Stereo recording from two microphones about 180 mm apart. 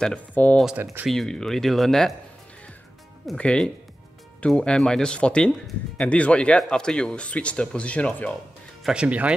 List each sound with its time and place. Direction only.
0.0 s speech: 5° left (ahead or behind)
0.7 s speech: 5° right (ahead or behind)
3.3 s speech: 5° left (ahead or behind)
8.8 s speech: 5° right (ahead or behind)